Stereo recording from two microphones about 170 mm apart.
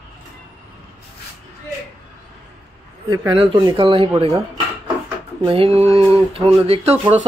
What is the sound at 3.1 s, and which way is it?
Speech, 25° right (ahead or behind).